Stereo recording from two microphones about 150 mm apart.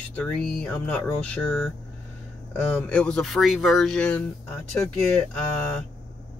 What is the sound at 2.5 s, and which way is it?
Speech, 5° left (ahead or behind).